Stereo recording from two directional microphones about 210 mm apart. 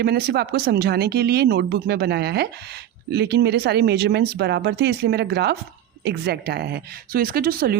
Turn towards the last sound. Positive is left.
turn(degrees=-45)  # may be behind; listen again after turning